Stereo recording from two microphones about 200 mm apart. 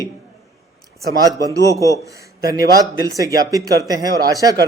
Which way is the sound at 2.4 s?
15° right (ahead or behind).